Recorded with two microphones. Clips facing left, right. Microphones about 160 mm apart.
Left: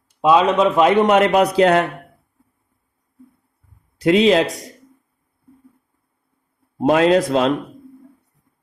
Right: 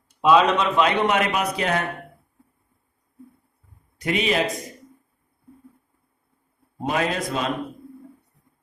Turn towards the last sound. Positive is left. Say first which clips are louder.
# left 11 dB
turn(degrees=80)